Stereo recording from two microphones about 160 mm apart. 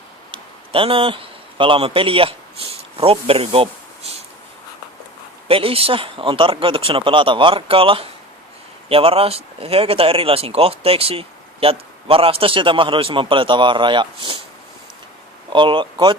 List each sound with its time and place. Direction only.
0.3 s a sound: 35° right (ahead or behind)
5.5 s speech: 35° right (ahead or behind)
15.5 s speech: 30° right (ahead or behind)